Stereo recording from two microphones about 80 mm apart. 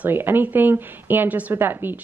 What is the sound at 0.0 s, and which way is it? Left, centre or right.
A woman's voice, right.